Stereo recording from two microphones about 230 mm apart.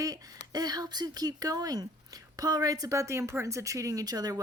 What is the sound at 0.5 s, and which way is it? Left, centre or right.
A woman's voice, centre.